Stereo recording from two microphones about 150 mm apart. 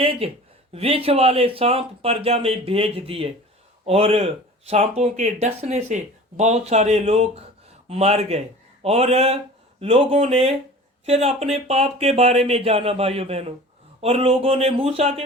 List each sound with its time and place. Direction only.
0.0 s speech: 40° right (ahead or behind)